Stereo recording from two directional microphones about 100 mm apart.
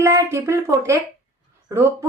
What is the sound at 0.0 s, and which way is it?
A woman's voice, 30° right (ahead or behind).